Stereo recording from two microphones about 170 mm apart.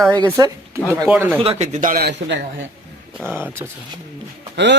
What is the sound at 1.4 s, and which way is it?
Speech, 40° right (ahead or behind).